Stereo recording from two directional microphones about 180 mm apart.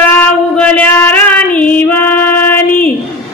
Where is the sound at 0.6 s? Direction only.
10° left (ahead or behind).